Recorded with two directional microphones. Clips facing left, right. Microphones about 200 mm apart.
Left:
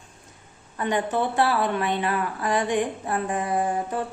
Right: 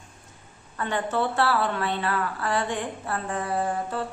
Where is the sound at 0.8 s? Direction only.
15° left (ahead or behind).